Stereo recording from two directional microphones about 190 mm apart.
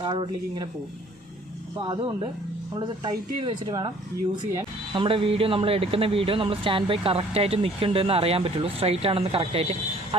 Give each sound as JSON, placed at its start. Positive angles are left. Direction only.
{"t": 0.0, "sound": "speech", "side_deg": -25}
{"t": 1.8, "sound": "speech", "side_deg": -25}
{"t": 4.9, "sound": "speech", "side_deg": -30}